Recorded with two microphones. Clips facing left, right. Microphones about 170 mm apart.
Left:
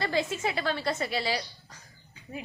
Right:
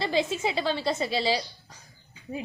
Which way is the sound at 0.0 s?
25° right (ahead or behind).